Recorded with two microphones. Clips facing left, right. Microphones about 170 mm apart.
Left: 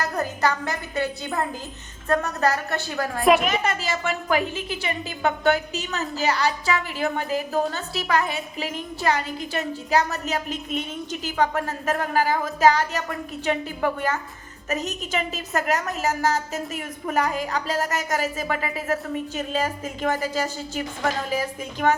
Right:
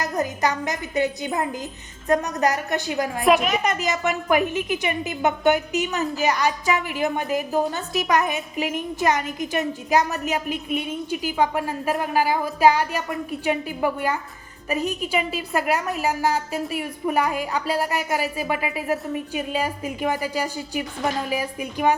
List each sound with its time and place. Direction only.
0.0 s a woman's voice: 15° right (ahead or behind)
3.2 s a woman's voice: centre (ahead or behind)
3.6 s a woman's voice: 15° right (ahead or behind)